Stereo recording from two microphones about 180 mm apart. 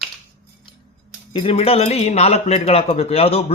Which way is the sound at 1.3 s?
35° left (ahead or behind).